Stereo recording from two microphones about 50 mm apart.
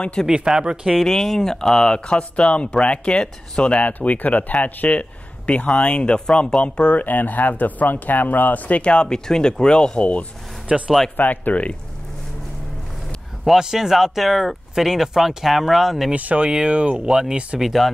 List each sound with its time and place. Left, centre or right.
0.0 s speech: centre
0.5 s speech: centre
0.9 s speech: centre
2.0 s speech: left
5.5 s speech: left
8.8 s speech: centre
10.7 s speech: right
11.1 s speech: left
13.6 s speech: centre
16.1 s speech: right
17.6 s speech: centre